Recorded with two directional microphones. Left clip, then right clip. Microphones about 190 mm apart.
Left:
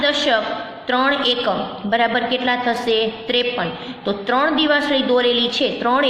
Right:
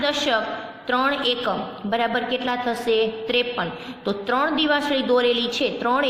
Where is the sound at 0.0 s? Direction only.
15° right (ahead or behind).